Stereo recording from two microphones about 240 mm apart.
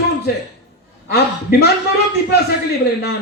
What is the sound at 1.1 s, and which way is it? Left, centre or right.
Speech, left.